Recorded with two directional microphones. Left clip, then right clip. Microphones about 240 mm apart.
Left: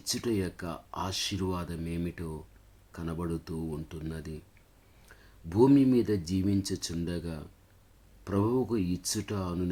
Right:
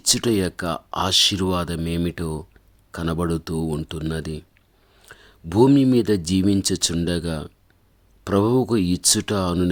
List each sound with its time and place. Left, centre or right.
0.0 s speech: right